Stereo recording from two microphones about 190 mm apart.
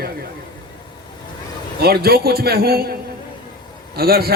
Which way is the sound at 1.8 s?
55° right (ahead or behind).